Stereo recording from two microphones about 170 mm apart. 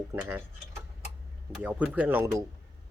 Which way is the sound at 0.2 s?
10° right (ahead or behind).